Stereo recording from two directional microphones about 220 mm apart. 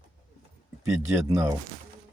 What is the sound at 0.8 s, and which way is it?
Speech, 15° right (ahead or behind).